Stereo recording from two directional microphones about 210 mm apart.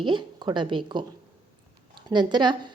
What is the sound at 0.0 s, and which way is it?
A woman's voice, 20° right (ahead or behind).